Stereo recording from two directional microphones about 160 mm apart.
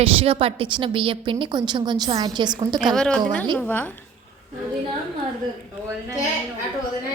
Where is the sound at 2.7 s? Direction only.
5° left (ahead or behind).